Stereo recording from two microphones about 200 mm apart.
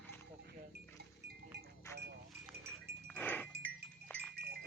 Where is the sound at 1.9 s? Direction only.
15° left (ahead or behind).